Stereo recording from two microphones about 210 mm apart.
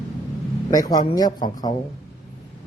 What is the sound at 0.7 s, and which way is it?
Speech, 15° left (ahead or behind).